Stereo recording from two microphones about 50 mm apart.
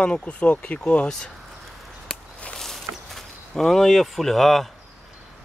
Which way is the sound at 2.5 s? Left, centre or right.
Centre.